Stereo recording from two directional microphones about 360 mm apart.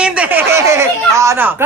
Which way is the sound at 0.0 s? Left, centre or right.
Centre.